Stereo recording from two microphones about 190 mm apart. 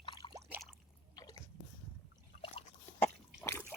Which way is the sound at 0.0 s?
25° left (ahead or behind).